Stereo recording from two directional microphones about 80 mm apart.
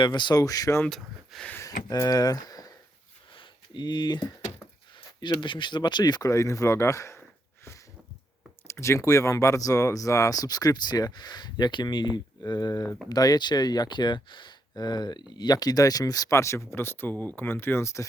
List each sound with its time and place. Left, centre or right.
0.0 s speech: left
0.3 s speech: left
0.9 s speech: centre
1.9 s speech: left
3.3 s a sound: left
5.4 s speech: left
6.3 s speech: left
8.6 s speech: left